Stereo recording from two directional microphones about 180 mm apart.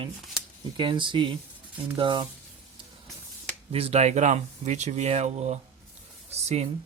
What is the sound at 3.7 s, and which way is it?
Speech, 35° right (ahead or behind).